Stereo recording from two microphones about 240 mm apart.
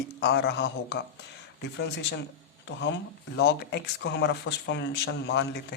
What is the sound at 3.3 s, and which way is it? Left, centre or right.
Speech, left.